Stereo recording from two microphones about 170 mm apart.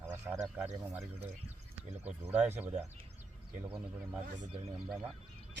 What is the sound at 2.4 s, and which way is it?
Speech, 10° right (ahead or behind).